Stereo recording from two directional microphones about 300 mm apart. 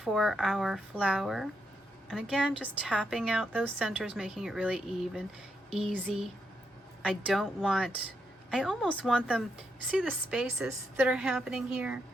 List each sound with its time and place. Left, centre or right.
0.0 s a woman's voice: centre